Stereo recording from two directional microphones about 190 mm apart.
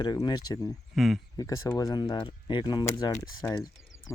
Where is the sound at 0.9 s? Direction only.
Centre (ahead or behind).